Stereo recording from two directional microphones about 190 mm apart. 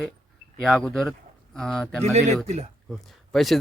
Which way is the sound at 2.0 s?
35° right (ahead or behind).